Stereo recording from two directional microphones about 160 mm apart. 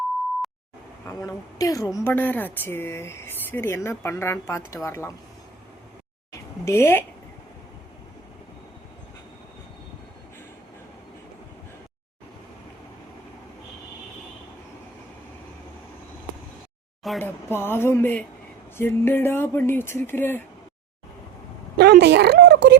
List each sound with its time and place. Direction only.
1.0 s a woman's voice: 20° left (ahead or behind)
6.3 s a sound: 15° left (ahead or behind)
17.2 s a woman's voice: 15° left (ahead or behind)
21.8 s speech: 90° right